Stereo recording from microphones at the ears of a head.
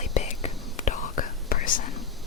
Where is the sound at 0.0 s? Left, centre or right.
Left.